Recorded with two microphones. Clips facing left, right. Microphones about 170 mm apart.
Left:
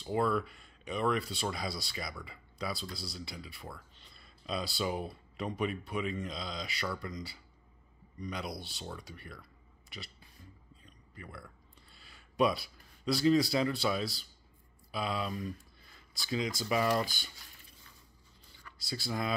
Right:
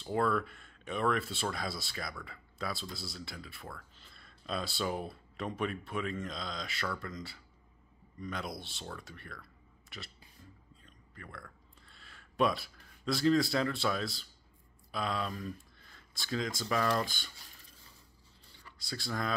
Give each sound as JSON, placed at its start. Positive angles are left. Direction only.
{"t": 0.0, "sound": "speech", "side_deg": 0}
{"t": 10.8, "sound": "a sound", "side_deg": 5}
{"t": 14.9, "sound": "speech", "side_deg": 5}
{"t": 18.8, "sound": "speech", "side_deg": 5}